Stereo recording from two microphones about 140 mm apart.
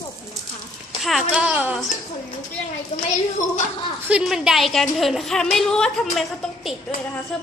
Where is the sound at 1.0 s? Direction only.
5° right (ahead or behind).